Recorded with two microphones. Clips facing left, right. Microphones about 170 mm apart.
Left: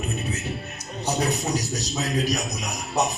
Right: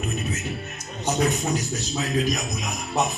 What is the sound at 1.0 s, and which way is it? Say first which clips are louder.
A man's voice: right 2 dB; 35° left (ahead or behind).